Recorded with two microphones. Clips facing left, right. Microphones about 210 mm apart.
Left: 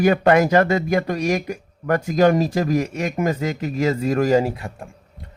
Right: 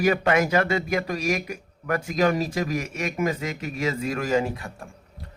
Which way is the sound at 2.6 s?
40° left (ahead or behind).